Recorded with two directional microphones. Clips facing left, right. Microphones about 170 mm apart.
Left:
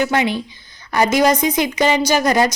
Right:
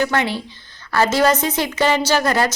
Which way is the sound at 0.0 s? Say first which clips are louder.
Left 2 dB; 15° left (ahead or behind).